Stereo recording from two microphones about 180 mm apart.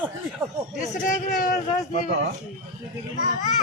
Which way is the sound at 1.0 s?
50° left (ahead or behind).